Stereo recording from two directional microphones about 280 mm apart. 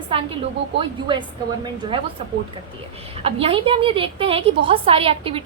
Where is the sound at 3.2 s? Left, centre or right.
Centre.